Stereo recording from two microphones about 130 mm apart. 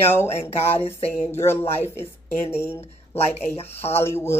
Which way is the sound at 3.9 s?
20° left (ahead or behind).